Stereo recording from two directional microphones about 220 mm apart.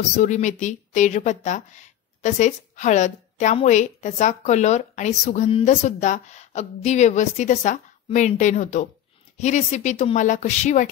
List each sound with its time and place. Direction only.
0.2 s speech: 35° left (ahead or behind)